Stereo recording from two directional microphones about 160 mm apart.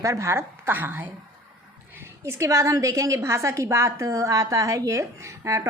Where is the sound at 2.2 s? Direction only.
15° right (ahead or behind).